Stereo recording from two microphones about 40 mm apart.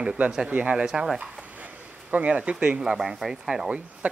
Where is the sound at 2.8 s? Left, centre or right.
Centre.